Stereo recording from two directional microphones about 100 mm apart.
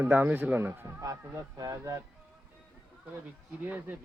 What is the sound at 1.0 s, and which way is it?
Speech, 35° right (ahead or behind).